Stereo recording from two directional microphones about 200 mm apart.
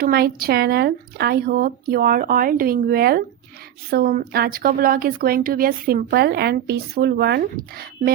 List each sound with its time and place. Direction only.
0.0 s a woman's voice: 50° right (ahead or behind)